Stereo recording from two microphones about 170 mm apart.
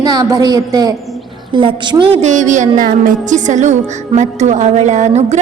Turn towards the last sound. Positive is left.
turn(degrees=-40)  # may be behind; listen again after turning